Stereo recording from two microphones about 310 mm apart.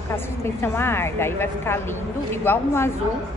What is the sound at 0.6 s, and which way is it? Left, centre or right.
Speech, centre.